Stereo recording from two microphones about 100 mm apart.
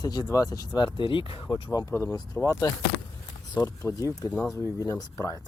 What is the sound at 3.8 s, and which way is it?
Speech, 35° left (ahead or behind).